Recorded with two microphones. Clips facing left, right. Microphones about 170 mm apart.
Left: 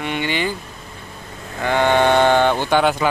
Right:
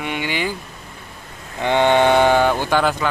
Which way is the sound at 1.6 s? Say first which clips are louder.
Right 1 dB; 20° right (ahead or behind).